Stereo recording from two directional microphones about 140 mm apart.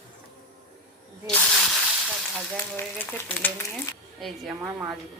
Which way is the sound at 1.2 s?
5° left (ahead or behind).